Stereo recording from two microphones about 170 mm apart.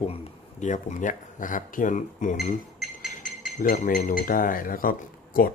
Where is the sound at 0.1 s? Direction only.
45° left (ahead or behind).